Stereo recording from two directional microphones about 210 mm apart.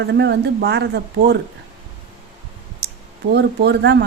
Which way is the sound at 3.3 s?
50° right (ahead or behind).